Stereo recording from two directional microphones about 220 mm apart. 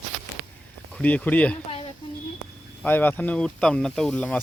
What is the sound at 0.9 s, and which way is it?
Speech, 5° left (ahead or behind).